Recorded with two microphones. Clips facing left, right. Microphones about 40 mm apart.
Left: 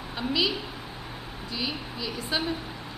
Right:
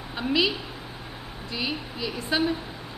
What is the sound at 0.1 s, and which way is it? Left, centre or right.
Speech, centre.